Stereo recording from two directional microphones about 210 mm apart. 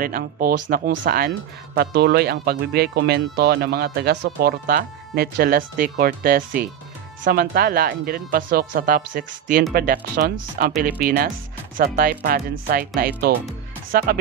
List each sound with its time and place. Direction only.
0.0 s speech: 45° right (ahead or behind)